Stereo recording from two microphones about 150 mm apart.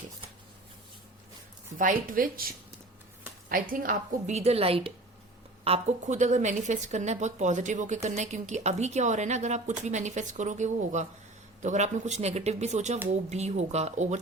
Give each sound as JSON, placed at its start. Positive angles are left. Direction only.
{"t": 1.8, "sound": "a woman's voice", "side_deg": -65}
{"t": 3.5, "sound": "a woman's voice", "side_deg": -65}